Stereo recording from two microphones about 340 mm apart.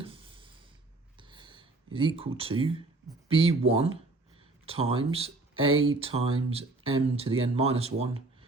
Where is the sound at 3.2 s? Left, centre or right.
Centre.